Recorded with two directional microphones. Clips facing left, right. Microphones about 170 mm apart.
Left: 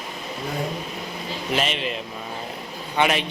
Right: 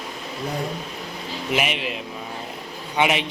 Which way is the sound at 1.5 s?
10° right (ahead or behind).